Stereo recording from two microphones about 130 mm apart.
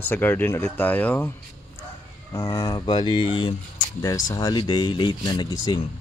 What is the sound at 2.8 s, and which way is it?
Speech, 35° left (ahead or behind).